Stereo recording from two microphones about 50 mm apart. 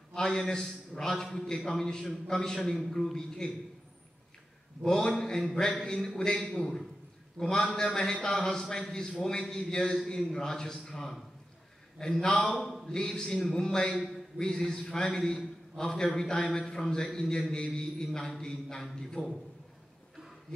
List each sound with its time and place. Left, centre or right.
0.1 s a man's voice: centre
4.8 s a man's voice: centre
7.8 s a man's voice: left